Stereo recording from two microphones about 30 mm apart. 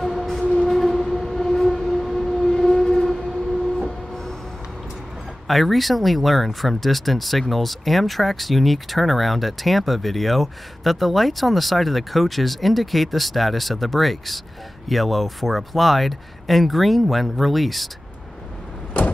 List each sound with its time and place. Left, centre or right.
0.0 s train: centre
0.6 s train: centre
0.8 s civil defense siren: centre
2.4 s train: centre
4.1 s a sound: centre
5.5 s speech: centre